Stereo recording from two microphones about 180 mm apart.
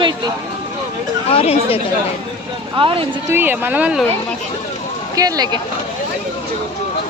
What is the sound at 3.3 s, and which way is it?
Speech, 10° right (ahead or behind).